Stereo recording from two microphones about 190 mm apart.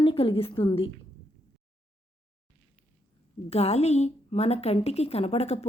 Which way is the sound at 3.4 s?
35° left (ahead or behind).